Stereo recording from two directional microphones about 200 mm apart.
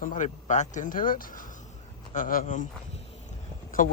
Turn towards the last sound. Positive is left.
turn(degrees=40)  # may be behind; listen again after turning